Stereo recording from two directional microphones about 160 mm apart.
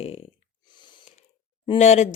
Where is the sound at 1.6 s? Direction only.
40° left (ahead or behind).